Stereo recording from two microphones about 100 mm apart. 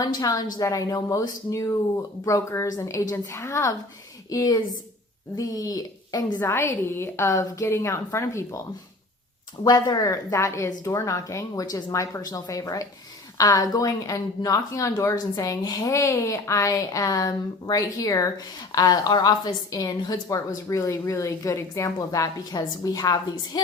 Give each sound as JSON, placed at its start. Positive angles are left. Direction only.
{"t": 0.0, "sound": "speech", "side_deg": 40}
{"t": 6.4, "sound": "a woman's voice", "side_deg": 25}
{"t": 9.6, "sound": "speech", "side_deg": 40}